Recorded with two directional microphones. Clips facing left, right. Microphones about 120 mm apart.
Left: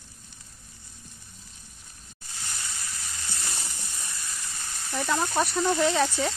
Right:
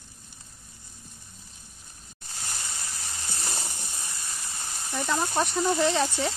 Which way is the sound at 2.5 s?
40° right (ahead or behind).